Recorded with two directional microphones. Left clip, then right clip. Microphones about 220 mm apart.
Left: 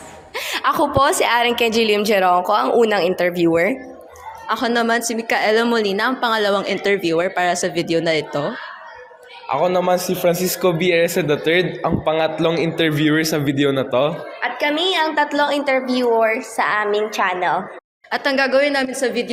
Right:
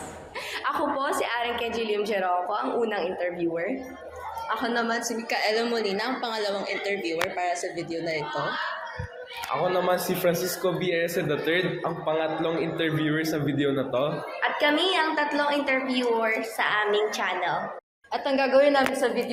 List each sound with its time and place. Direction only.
0.3 s a woman's voice: 50° left (ahead or behind)
9.5 s a man's voice: 35° left (ahead or behind)